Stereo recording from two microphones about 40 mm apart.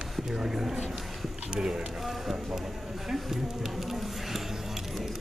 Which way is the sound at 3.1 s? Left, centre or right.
Centre.